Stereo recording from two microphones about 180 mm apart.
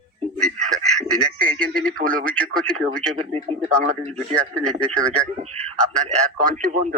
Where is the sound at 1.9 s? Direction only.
50° right (ahead or behind).